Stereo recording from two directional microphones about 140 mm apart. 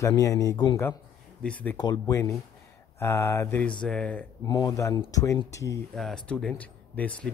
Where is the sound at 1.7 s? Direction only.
30° left (ahead or behind).